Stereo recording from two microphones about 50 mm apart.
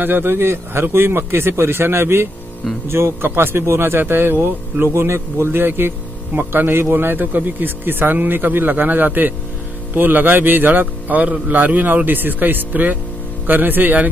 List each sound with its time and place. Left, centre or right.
0.0 s speech: right
11.2 s a man's voice: right
11.5 s speech: right